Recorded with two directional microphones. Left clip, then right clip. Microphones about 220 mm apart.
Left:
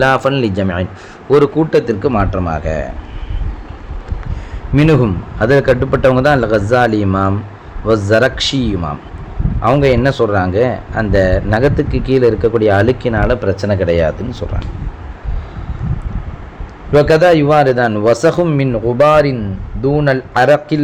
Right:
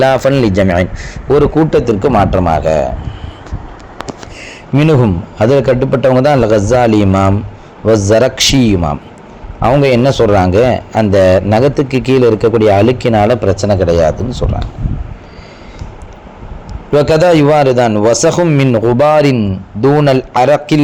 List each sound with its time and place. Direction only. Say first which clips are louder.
0.0 s a man's voice: right 3 dB; 15° right (ahead or behind)
4.8 s a man's voice: right 1 dB; 10° right (ahead or behind)
16.9 s a man's voice: right 1 dB; 10° right (ahead or behind)